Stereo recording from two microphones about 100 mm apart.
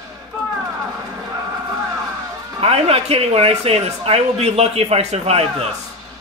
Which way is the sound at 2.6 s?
80° right.